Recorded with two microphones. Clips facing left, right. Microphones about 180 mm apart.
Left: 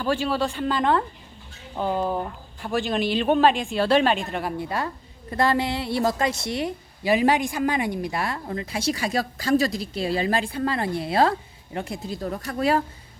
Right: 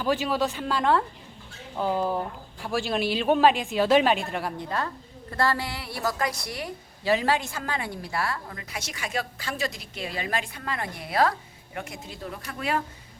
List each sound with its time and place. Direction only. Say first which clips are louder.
0.0 s a woman's voice: left 1 dB; 10° right (ahead or behind); by 4.9 s 10° left (ahead or behind)
5.3 s a woman's voice: left 5 dB; 20° left (ahead or behind); by 12.8 s 35° left (ahead or behind)